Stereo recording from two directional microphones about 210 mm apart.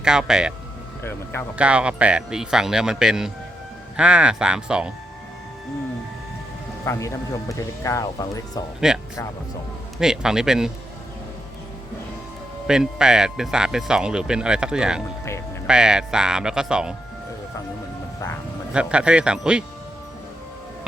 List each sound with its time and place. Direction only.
0.0 s speech: 5° right (ahead or behind)
1.0 s speech: 10° left (ahead or behind)
1.5 s speech: 5° right (ahead or behind)
6.8 s speech: 15° left (ahead or behind)
8.8 s speech: 5° right (ahead or behind)
10.0 s speech: 5° right (ahead or behind)
12.6 s speech: 5° right (ahead or behind)
18.7 s speech: 5° right (ahead or behind)